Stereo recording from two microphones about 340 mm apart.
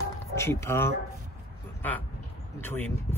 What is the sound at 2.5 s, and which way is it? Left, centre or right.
Speech, centre.